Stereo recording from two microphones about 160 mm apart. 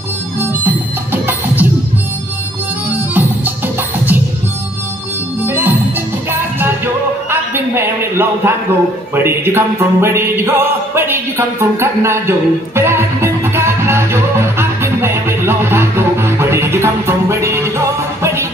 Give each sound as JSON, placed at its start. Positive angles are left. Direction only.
{"t": 0.4, "sound": "music", "side_deg": -10}
{"t": 3.2, "sound": "music", "side_deg": -10}
{"t": 5.4, "sound": "music", "side_deg": -10}
{"t": 7.2, "sound": "a sound", "side_deg": -15}
{"t": 9.1, "sound": "speech", "side_deg": -15}
{"t": 11.0, "sound": "music", "side_deg": -15}